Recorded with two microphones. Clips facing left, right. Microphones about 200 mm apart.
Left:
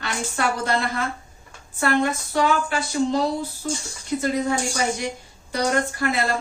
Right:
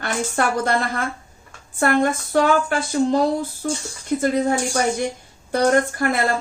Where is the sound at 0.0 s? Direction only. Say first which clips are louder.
Right 3 dB; 50° right (ahead or behind).